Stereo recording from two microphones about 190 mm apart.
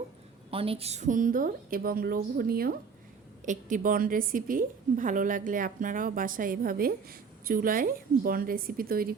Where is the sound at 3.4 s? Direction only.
40° right (ahead or behind).